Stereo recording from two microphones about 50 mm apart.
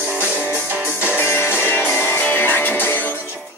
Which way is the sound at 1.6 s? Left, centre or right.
Left.